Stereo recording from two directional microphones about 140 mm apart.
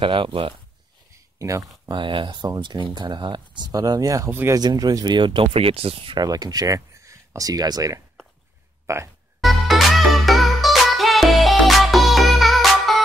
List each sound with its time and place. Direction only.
0.0 s speech: 35° right (ahead or behind)
1.4 s speech: 25° right (ahead or behind)
2.0 s speech: 35° right (ahead or behind); by 4.6 s 20° right (ahead or behind)
4.6 s speech: 30° right (ahead or behind)
9.4 s music: centre (ahead or behind)